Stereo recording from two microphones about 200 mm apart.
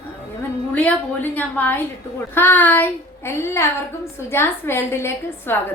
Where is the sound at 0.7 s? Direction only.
5° left (ahead or behind).